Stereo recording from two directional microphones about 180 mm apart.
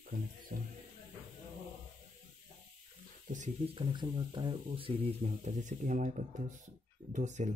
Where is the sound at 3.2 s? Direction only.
45° right (ahead or behind).